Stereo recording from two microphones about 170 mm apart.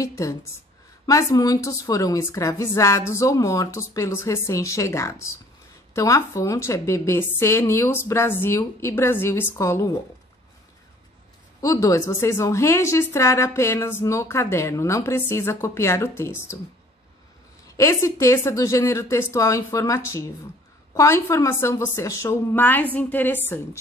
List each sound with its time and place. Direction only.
0.0 s a woman's voice: 20° left (ahead or behind)
11.6 s a woman's voice: 20° left (ahead or behind)
17.6 s a woman's voice: 20° left (ahead or behind)